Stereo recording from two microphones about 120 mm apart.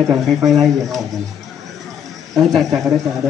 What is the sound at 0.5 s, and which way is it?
Speech, centre (ahead or behind).